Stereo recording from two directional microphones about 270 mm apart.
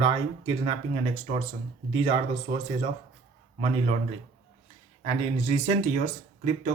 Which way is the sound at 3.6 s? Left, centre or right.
Right.